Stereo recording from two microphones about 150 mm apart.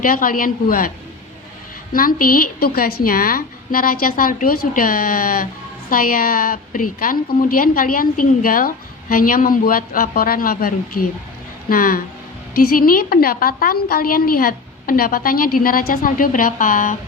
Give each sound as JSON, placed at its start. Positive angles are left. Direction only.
{"t": 0.0, "sound": "a woman's voice", "side_deg": 70}
{"t": 1.9, "sound": "a woman's voice", "side_deg": 70}